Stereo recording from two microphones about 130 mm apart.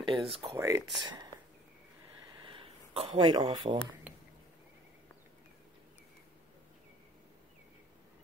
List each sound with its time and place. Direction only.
0.0 s speech: 45° right (ahead or behind)
0.6 s speech: 20° right (ahead or behind)
1.0 s speech: 35° right (ahead or behind)
2.4 s a sound: 45° right (ahead or behind)
3.2 s speech: 30° right (ahead or behind)